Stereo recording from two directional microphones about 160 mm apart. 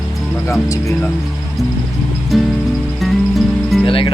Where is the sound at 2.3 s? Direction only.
Centre (ahead or behind).